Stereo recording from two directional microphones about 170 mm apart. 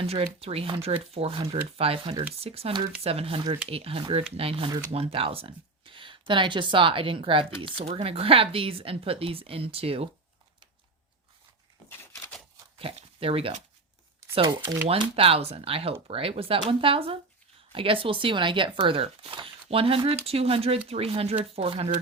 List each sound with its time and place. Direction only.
0.0 s speech: 35° right (ahead or behind)
12.8 s speech: 35° right (ahead or behind)